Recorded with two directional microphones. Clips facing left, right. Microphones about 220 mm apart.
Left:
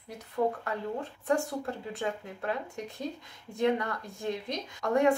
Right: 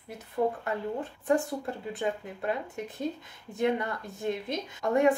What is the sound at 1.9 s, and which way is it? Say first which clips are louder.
A woman's voice: right 2 dB; centre (ahead or behind).